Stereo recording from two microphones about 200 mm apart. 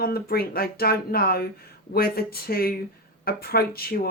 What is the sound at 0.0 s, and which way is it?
Speech, 50° left (ahead or behind).